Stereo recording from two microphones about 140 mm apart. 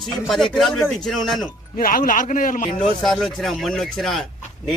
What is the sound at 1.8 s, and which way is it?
Speech, 85° left.